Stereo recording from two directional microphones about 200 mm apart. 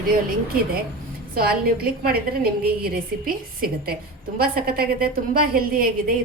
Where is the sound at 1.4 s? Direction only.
50° right (ahead or behind).